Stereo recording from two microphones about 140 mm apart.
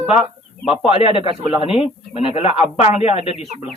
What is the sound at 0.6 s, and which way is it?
Speech, 40° left (ahead or behind).